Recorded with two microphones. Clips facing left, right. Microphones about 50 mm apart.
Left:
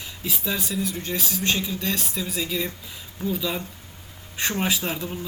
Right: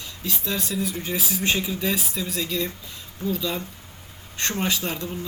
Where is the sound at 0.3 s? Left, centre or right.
Centre.